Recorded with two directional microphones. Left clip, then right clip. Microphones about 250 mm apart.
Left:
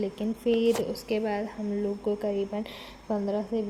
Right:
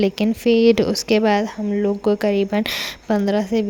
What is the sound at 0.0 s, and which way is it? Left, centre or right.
Speech, right.